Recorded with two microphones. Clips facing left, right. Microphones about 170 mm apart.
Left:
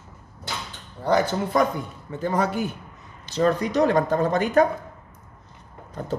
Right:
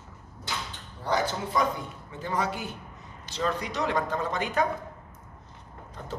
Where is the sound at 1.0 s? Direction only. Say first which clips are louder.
Left 6 dB; 50° left (ahead or behind).